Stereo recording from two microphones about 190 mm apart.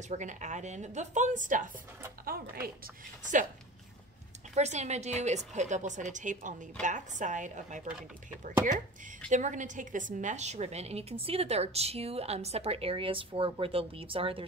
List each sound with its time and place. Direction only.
0.1 s a woman's voice: 40° right (ahead or behind)
4.6 s a woman's voice: 35° right (ahead or behind)
9.3 s a woman's voice: 40° right (ahead or behind)